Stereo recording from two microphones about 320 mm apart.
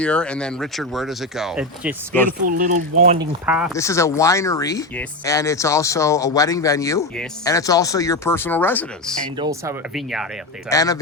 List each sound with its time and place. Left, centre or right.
0.0 s speech: centre
2.4 s speech: right
3.4 s speech: centre
3.8 s speech: centre
9.4 s speech: centre
10.7 s speech: centre